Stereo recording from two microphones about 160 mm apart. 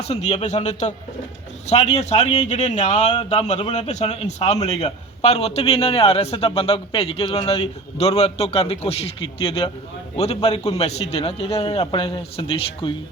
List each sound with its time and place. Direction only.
0.0 s a man's voice: 40° left (ahead or behind)